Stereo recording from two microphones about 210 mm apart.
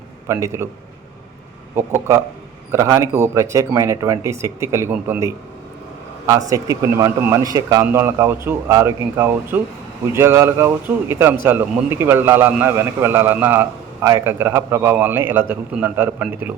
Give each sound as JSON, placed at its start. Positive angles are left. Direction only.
{"t": 0.3, "sound": "a man's voice", "side_deg": -15}
{"t": 1.7, "sound": "a man's voice", "side_deg": -15}